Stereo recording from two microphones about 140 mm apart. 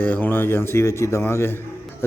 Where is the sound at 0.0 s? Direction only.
10° left (ahead or behind).